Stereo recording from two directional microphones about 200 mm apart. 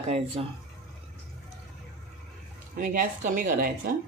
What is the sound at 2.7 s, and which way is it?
Speech, 45° right (ahead or behind).